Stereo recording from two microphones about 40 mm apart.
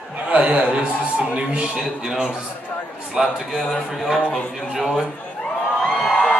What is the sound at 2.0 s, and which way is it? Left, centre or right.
A man's voice, centre.